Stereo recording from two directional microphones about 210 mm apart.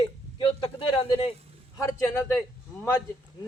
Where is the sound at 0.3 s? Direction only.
25° left (ahead or behind).